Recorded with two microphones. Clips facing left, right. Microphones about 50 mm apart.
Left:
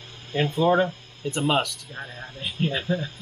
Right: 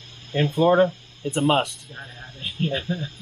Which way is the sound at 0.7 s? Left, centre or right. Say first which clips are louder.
Right 4 dB; centre.